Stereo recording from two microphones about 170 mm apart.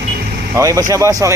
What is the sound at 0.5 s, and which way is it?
Speech, 20° right (ahead or behind).